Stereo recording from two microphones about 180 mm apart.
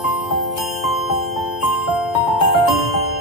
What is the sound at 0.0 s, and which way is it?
Glockenspiel, centre (ahead or behind).